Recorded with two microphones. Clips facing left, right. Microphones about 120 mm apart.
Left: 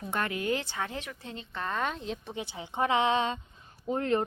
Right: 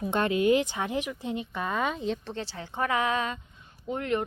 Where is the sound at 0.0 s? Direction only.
20° right (ahead or behind); by 2.1 s centre (ahead or behind).